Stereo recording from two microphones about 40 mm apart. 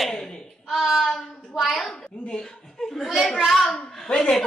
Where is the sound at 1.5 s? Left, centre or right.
Centre.